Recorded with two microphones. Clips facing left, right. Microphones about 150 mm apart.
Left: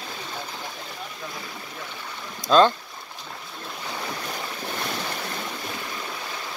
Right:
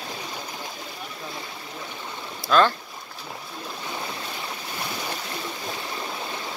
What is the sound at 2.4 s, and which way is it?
Speech, 20° left (ahead or behind).